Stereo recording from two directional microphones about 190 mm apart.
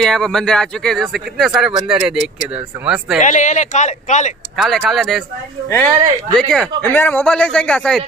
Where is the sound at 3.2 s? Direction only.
40° left (ahead or behind).